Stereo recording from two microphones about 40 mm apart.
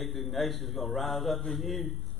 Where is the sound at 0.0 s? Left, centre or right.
Centre.